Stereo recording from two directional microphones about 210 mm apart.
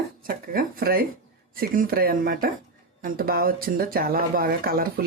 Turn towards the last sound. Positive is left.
turn(degrees=-45)  # may be behind; listen again after turning